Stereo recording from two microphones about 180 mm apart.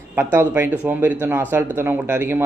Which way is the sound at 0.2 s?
10° right (ahead or behind).